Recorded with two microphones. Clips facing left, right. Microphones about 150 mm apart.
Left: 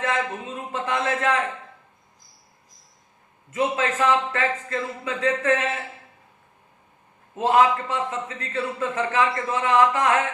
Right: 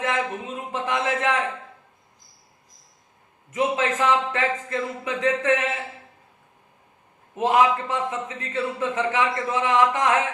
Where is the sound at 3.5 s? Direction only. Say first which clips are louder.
Right 1 dB; 20° right (ahead or behind).